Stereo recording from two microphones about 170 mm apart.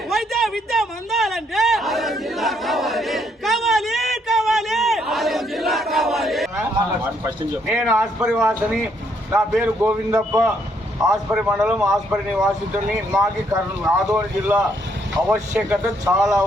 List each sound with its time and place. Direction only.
0.1 s a sound: centre (ahead or behind)
7.3 s speech: 15° right (ahead or behind)
11.0 s speech: 15° right (ahead or behind)
13.5 s speech: 10° right (ahead or behind)